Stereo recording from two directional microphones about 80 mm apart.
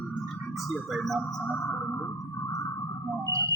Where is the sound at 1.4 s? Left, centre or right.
Left.